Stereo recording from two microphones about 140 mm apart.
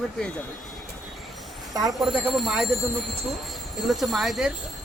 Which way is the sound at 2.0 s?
Centre (ahead or behind).